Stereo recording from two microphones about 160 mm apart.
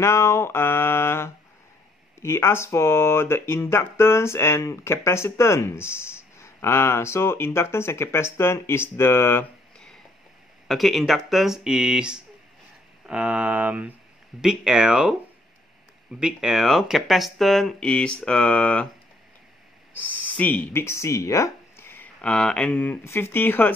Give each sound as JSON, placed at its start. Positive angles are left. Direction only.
{"t": 0.0, "sound": "speech", "side_deg": 15}
{"t": 16.2, "sound": "speech", "side_deg": -5}
{"t": 20.0, "sound": "speech", "side_deg": 10}